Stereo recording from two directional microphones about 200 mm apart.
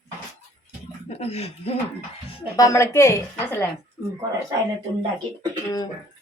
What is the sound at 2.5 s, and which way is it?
A woman's voice, 15° left (ahead or behind).